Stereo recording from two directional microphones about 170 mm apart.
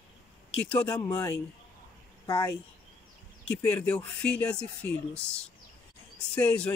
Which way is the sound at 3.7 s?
5° left (ahead or behind).